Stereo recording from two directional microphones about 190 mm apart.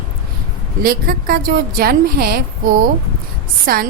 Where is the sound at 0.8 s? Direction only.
50° right (ahead or behind).